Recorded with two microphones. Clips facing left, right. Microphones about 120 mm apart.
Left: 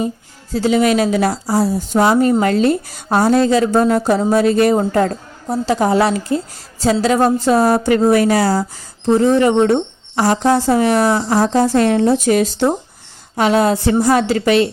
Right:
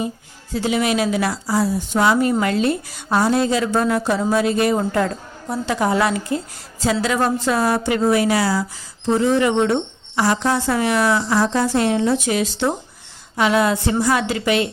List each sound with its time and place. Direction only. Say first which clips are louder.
0.5 s a woman's voice: left 5 dB; 35° left (ahead or behind)